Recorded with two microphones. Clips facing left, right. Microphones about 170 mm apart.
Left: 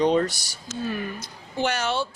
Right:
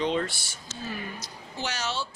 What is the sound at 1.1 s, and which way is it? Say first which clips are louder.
Speech: left 7 dB; 55° left (ahead or behind).